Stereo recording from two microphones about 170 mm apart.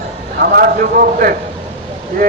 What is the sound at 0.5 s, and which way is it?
Speech, 60° right (ahead or behind).